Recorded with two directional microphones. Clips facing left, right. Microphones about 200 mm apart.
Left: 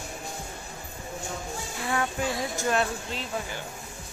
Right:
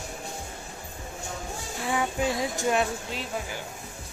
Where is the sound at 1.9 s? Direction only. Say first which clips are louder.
Right 2 dB; 15° right (ahead or behind).